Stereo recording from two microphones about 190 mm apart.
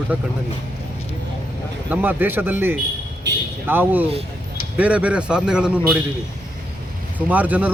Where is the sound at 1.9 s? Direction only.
10° right (ahead or behind).